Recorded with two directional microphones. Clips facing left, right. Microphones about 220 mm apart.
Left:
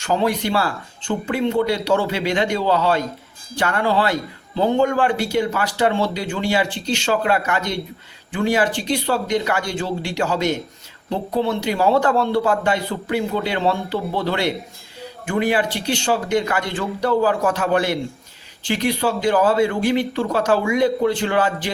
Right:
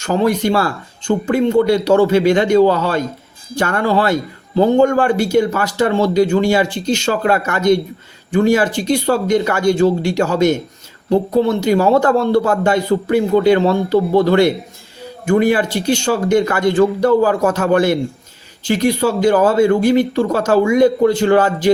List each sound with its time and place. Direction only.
0.0 s speech: 45° right (ahead or behind)